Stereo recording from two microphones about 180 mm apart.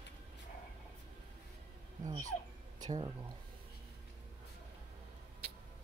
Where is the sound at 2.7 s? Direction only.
20° right (ahead or behind).